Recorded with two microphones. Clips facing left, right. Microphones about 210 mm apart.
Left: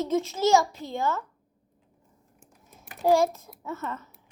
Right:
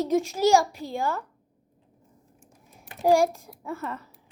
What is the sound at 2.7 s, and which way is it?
A child's voice, 15° right (ahead or behind).